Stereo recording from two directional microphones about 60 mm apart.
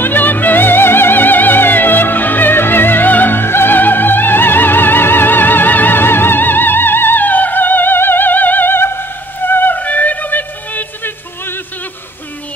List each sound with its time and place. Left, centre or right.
0.0 s music: left